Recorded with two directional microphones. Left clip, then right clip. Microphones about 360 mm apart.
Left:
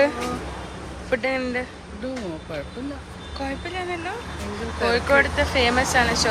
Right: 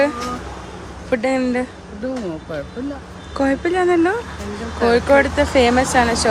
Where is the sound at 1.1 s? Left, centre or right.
Centre.